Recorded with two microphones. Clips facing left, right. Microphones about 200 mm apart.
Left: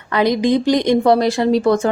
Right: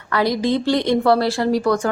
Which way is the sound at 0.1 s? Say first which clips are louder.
Left 4 dB; 20° left (ahead or behind).